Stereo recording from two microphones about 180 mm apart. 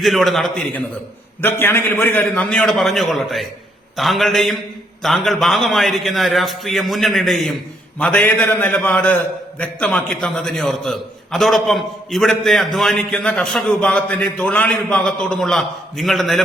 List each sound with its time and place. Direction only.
0.0 s a man's voice: centre (ahead or behind)